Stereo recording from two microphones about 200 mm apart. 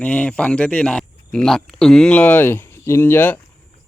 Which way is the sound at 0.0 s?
5° left (ahead or behind).